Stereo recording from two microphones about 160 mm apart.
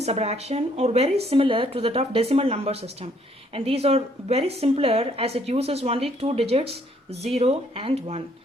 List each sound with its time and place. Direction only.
0.0 s a woman's voice: 40° right (ahead or behind)